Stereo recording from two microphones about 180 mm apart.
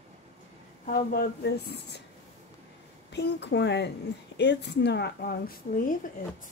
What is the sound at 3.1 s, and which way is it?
Speech, 75° left (ahead or behind).